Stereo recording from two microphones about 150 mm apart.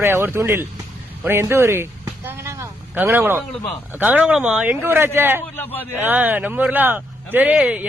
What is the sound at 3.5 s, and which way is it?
Speech, 10° left (ahead or behind).